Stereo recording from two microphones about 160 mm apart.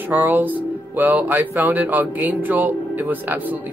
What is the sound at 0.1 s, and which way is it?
Speech, 10° right (ahead or behind).